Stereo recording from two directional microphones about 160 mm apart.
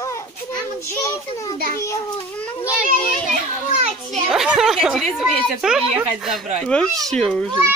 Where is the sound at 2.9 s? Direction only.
50° right (ahead or behind).